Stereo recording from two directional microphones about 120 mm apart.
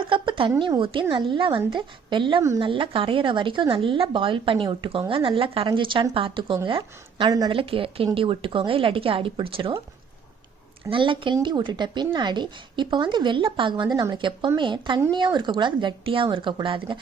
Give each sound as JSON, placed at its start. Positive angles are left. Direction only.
{"t": 0.0, "sound": "speech", "side_deg": -45}
{"t": 10.8, "sound": "speech", "side_deg": -45}